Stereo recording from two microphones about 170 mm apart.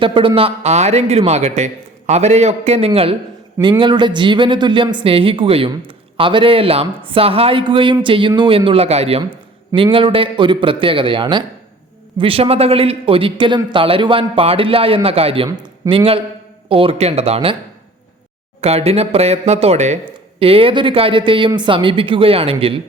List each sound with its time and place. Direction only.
0.0 s a man's voice: 30° right (ahead or behind)
18.6 s a man's voice: 40° right (ahead or behind)